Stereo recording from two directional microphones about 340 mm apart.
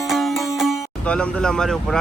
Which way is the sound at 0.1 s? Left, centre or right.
Centre.